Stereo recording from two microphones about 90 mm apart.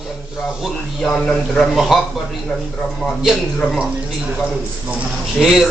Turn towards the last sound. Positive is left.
turn(degrees=-5)  # may be behind; listen again after turning